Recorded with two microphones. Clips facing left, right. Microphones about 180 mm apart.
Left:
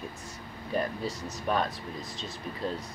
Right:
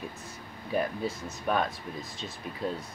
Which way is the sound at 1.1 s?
55° right (ahead or behind).